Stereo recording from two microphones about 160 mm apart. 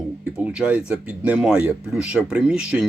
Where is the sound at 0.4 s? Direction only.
5° right (ahead or behind).